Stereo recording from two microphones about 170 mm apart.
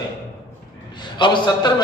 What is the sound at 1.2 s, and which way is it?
Speech, 25° left (ahead or behind).